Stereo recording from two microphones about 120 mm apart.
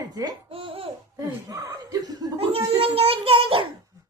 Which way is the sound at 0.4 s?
50° right (ahead or behind).